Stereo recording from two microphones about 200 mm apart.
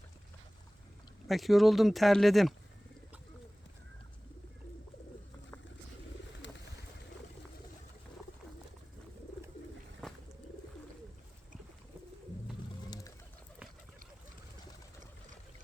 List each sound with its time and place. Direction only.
1.3 s speech: centre (ahead or behind)
6.4 s bird: 65° left (ahead or behind)
12.9 s bird: 15° left (ahead or behind)